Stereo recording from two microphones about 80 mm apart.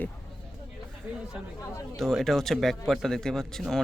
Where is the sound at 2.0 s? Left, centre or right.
Centre.